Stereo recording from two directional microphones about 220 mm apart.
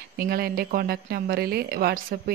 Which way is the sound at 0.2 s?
40° right (ahead or behind).